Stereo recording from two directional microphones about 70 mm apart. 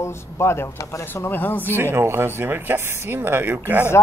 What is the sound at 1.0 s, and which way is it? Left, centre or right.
Speech, left.